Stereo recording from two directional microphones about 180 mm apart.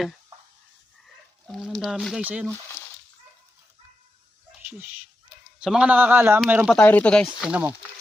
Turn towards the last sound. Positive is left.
turn(degrees=-5)  # may be behind; listen again after turning